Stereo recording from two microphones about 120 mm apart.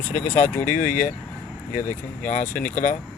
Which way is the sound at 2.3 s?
90° left.